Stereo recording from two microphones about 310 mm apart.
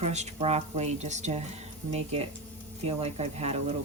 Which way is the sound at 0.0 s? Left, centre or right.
Right.